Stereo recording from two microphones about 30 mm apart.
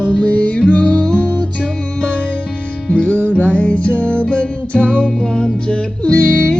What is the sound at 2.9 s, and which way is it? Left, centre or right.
Music, left.